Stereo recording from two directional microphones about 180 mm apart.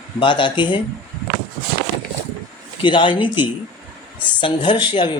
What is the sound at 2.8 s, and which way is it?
Speech, 25° left (ahead or behind).